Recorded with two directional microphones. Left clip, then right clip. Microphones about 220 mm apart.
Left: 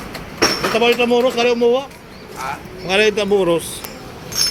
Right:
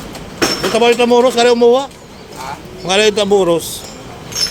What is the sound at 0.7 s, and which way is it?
Speech, 25° right (ahead or behind).